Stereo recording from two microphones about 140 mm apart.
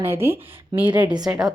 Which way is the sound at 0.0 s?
15° right (ahead or behind).